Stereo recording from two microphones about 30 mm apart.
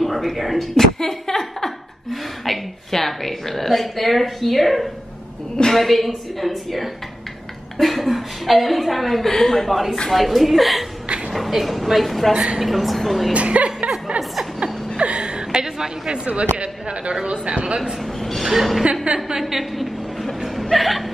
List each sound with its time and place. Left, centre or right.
0.0 s speech: centre
0.7 s a sound: centre
2.4 s a woman's voice: centre
9.3 s a woman's voice: centre
13.3 s speech: right
14.6 s chuckle: right
16.3 s speech: right
18.4 s a woman's voice: centre
19.1 s speech: right
19.5 s a sound: centre
20.7 s a woman's voice: centre